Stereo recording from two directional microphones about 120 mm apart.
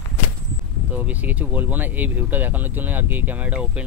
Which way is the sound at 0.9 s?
15° right (ahead or behind).